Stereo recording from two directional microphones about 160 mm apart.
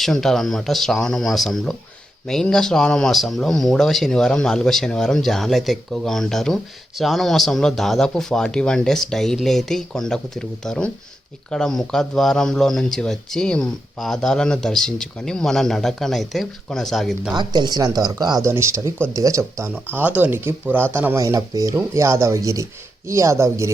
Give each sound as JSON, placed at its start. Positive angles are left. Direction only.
{"t": 0.0, "sound": "speech", "side_deg": 5}
{"t": 17.3, "sound": "speech", "side_deg": -25}